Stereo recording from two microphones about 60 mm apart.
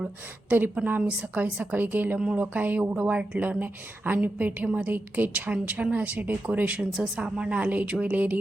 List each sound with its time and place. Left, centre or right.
0.9 s a woman's voice: right
2.1 s a woman's voice: centre
2.4 s a woman's voice: right
6.9 s a woman's voice: centre; by 8.4 s right